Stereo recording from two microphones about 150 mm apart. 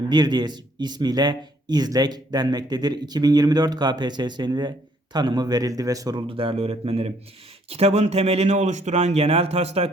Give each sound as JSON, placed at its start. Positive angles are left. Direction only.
{"t": 0.1, "sound": "a man's voice", "side_deg": -30}
{"t": 6.2, "sound": "speech", "side_deg": -35}